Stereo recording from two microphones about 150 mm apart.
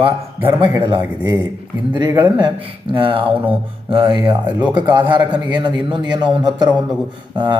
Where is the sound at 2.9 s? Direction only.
35° right (ahead or behind).